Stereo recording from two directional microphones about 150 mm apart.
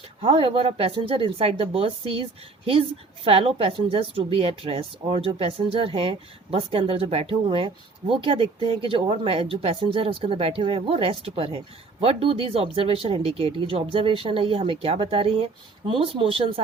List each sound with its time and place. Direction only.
0.2 s speech: 40° right (ahead or behind)
3.2 s speech: 40° right (ahead or behind)